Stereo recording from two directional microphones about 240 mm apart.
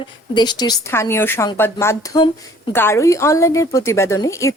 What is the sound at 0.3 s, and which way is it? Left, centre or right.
A woman's voice, centre.